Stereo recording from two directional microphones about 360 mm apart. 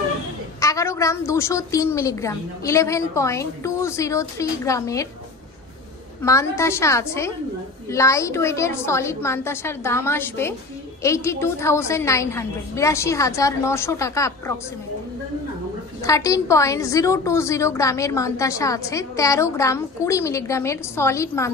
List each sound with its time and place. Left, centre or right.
0.6 s a woman's voice: centre
6.2 s a woman's voice: centre
16.0 s a woman's voice: centre